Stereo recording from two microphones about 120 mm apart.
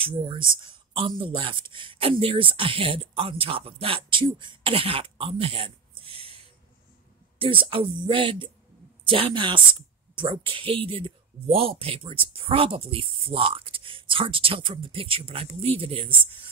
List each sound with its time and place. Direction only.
0.0 s speech: 45° right (ahead or behind)